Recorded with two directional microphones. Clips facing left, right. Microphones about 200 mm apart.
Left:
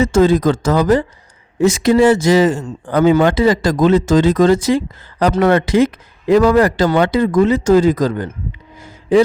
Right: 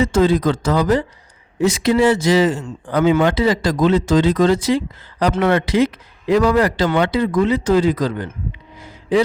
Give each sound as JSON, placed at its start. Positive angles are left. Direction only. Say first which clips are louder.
{"t": 0.0, "sound": "a man's voice", "louder": "left 3 dB", "side_deg": 45}